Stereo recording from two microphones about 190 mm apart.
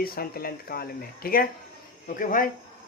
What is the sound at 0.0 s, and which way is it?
Speech, 50° left (ahead or behind).